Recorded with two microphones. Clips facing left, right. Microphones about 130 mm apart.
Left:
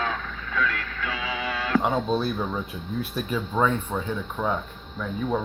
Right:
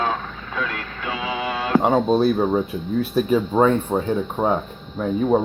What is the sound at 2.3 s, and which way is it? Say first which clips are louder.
Speech: right 9 dB; 40° right (ahead or behind).